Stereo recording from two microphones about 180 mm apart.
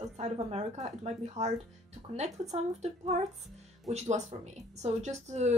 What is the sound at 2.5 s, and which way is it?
Speech, 40° right (ahead or behind).